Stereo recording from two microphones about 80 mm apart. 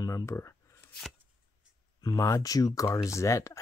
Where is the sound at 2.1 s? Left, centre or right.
Left.